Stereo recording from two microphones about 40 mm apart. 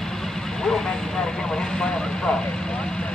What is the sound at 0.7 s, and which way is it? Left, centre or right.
Speech, centre.